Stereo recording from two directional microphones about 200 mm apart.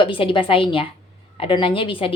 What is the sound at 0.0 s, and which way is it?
A woman's voice, 25° left (ahead or behind).